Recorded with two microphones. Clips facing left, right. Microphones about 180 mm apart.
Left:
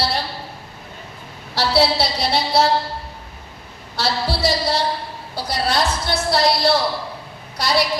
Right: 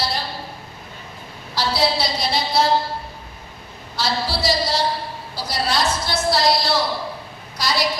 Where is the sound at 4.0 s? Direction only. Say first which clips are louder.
Left 2 dB; 60° left (ahead or behind).